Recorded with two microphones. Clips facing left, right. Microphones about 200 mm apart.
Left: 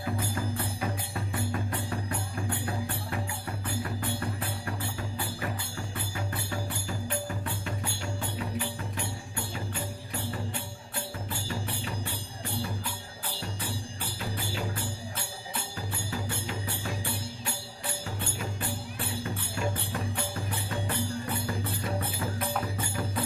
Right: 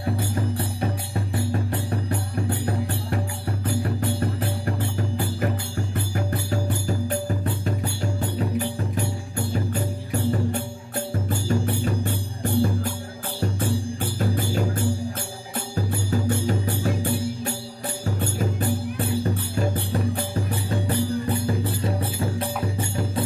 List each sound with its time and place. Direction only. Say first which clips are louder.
0.7 s music: right 6 dB; 35° right (ahead or behind)
6.1 s music: right 8 dB; 40° right (ahead or behind)